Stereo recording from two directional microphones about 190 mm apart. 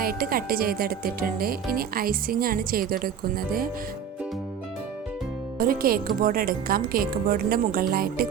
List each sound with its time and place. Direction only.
0.0 s speech: 50° right (ahead or behind)
5.5 s speech: 50° right (ahead or behind)